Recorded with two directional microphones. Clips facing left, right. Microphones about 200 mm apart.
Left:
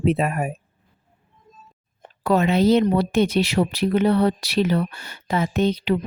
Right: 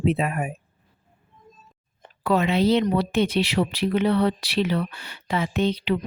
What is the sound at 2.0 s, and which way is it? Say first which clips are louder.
A woman's voice: left 2 dB; 45° left (ahead or behind).